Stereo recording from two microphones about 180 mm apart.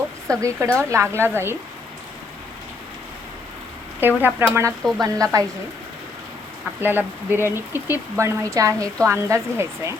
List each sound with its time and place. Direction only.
0.3 s speech: 15° right (ahead or behind)
4.2 s speech: 10° right (ahead or behind)
4.8 s speech: centre (ahead or behind)
5.0 s a woman's voice: 20° right (ahead or behind)
6.8 s speech: 10° right (ahead or behind)